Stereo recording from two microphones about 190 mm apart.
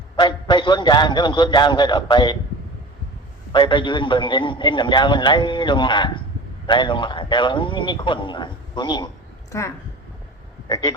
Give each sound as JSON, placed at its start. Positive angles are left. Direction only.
{"t": 0.2, "sound": "a man's voice", "side_deg": 25}
{"t": 3.5, "sound": "a man's voice", "side_deg": 25}